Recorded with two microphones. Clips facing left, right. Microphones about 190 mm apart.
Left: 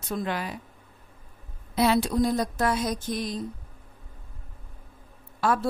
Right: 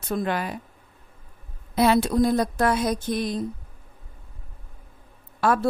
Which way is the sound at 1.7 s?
55° right (ahead or behind).